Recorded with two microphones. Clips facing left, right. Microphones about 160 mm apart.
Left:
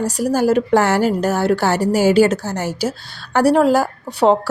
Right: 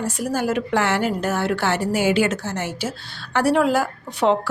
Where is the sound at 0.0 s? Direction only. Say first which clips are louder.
Left 6 dB; 40° left (ahead or behind).